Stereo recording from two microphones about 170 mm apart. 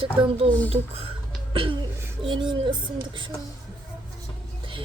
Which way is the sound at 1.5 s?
30° right (ahead or behind).